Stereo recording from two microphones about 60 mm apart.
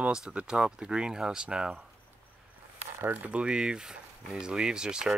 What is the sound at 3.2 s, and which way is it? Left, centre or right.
Speech, centre.